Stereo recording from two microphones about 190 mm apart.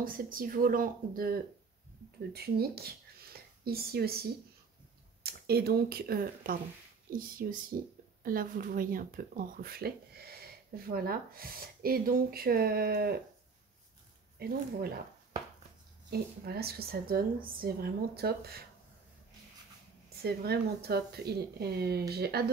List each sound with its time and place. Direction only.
0.0 s speech: 50° right (ahead or behind)
14.4 s speech: 55° right (ahead or behind)
16.1 s speech: 55° right (ahead or behind)
20.2 s speech: 55° right (ahead or behind)